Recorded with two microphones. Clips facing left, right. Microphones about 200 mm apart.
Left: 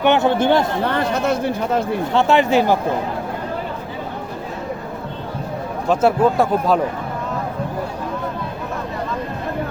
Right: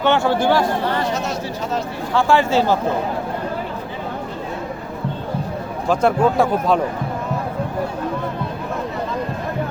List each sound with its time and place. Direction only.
0.0 s speech: 20° left (ahead or behind)
0.9 s speech: 55° left (ahead or behind)
2.1 s speech: 20° left (ahead or behind)
5.9 s speech: 5° left (ahead or behind)